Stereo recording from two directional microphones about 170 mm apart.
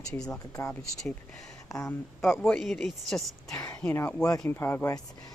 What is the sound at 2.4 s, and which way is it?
Speech, 5° left (ahead or behind).